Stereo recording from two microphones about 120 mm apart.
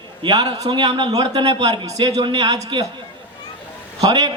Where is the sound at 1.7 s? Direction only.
30° right (ahead or behind).